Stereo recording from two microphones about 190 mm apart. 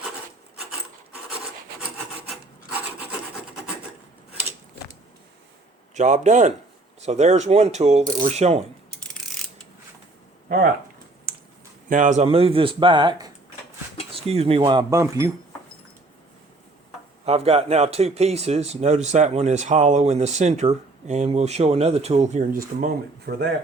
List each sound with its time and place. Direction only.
2.3 s rub: 5° right (ahead or behind)
5.9 s speech: 40° right (ahead or behind)
11.9 s speech: 40° right (ahead or behind); by 15.3 s 15° right (ahead or behind)
17.2 s speech: 30° right (ahead or behind); by 23.5 s 55° right (ahead or behind)